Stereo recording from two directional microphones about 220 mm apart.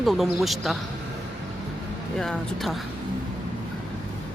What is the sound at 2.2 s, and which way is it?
Speech, centre (ahead or behind).